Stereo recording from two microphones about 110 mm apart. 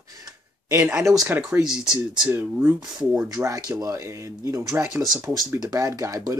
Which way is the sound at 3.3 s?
30° right (ahead or behind).